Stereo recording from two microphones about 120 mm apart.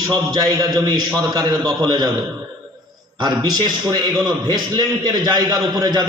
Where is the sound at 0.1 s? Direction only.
35° right (ahead or behind).